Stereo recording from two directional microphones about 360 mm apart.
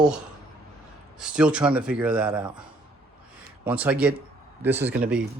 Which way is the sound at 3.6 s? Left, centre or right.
Centre.